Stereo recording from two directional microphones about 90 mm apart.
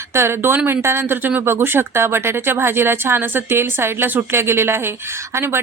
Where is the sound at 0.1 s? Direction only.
30° right (ahead or behind).